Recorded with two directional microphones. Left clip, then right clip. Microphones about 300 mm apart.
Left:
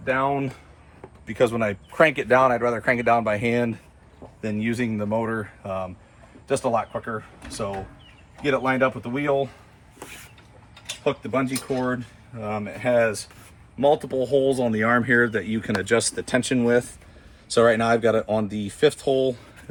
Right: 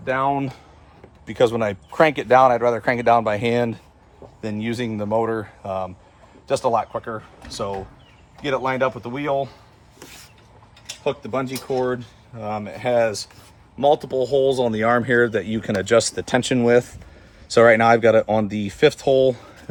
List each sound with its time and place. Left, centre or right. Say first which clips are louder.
0.0 s speech: right 2 dB; right
8.4 s speech: even; right
11.1 s speech: even; centre